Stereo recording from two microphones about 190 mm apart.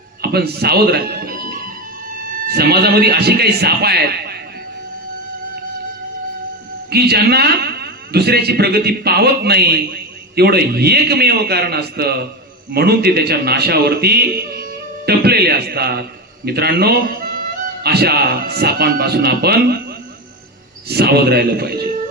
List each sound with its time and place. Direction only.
0.2 s a man's voice: 55° right (ahead or behind)
6.9 s a man's voice: 55° right (ahead or behind)
20.8 s a man's voice: 55° right (ahead or behind)